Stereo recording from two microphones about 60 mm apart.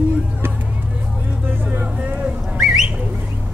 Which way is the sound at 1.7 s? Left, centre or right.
Right.